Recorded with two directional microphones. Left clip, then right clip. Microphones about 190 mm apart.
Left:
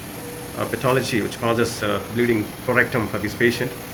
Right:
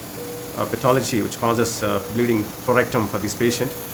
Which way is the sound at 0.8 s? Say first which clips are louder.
Right 2 dB; 45° right (ahead or behind).